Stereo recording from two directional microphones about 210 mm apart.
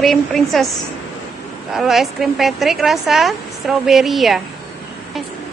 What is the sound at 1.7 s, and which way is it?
A woman's voice, centre (ahead or behind).